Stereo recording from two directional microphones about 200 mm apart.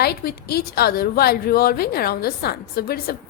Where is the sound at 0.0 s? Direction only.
50° left (ahead or behind).